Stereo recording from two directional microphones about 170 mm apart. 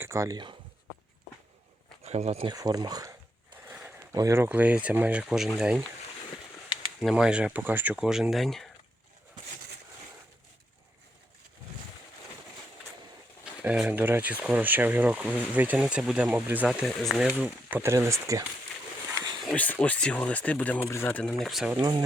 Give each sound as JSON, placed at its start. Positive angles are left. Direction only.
{"t": 0.0, "sound": "speech", "side_deg": -20}
{"t": 2.0, "sound": "speech", "side_deg": -40}
{"t": 2.5, "sound": "speech", "side_deg": -25}
{"t": 3.7, "sound": "speech", "side_deg": -10}
{"t": 7.0, "sound": "speech", "side_deg": -5}
{"t": 13.4, "sound": "speech", "side_deg": -5}
{"t": 19.5, "sound": "speech", "side_deg": 10}
{"t": 21.8, "sound": "speech", "side_deg": -25}